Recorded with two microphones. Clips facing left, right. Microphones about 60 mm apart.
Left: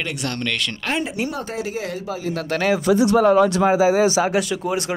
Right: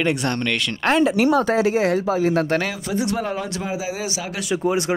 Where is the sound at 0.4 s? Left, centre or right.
Centre.